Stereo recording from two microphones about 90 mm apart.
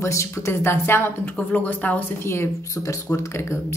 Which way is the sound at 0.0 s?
35° left (ahead or behind).